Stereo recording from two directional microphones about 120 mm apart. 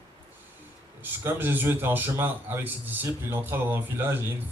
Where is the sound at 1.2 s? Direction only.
15° right (ahead or behind).